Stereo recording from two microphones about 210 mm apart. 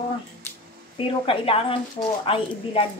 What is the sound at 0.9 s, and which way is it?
A woman's voice, 25° left (ahead or behind).